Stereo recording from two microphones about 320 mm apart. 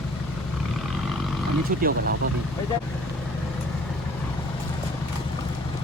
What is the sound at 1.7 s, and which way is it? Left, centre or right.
Speech, right.